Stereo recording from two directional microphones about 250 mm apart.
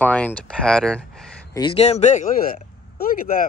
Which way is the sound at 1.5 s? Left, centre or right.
Centre.